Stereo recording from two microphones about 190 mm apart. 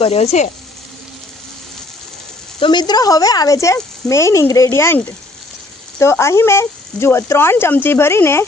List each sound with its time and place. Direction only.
0.0 s speech: 35° left (ahead or behind)
2.6 s speech: 25° left (ahead or behind)